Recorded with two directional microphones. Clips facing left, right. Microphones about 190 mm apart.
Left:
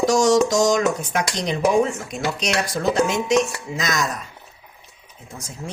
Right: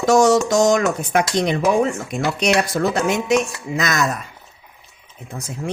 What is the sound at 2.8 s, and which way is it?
Speech, 90° right.